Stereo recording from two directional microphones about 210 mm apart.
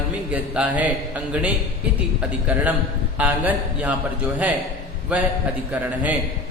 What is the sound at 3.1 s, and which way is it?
Speech, 5° right (ahead or behind).